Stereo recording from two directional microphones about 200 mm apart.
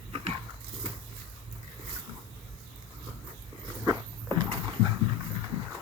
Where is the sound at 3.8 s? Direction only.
20° right (ahead or behind).